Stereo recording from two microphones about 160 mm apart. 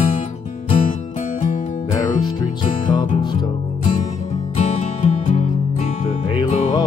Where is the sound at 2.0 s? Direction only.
25° left (ahead or behind).